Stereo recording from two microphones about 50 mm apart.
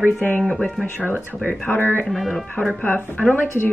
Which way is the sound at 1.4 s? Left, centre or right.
Left.